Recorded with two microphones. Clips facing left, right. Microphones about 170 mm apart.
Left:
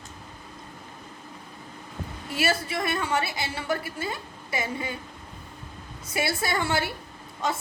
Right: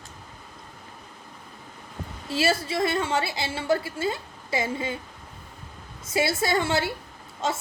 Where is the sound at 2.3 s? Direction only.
25° right (ahead or behind).